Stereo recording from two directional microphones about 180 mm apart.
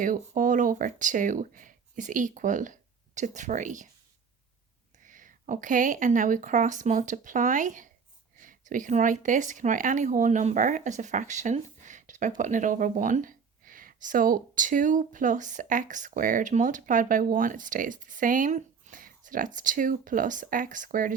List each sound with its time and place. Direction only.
0.0 s speech: 45° right (ahead or behind)
5.0 s speech: 45° right (ahead or behind)